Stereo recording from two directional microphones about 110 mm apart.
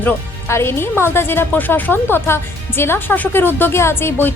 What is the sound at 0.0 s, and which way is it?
Speech, 20° left (ahead or behind).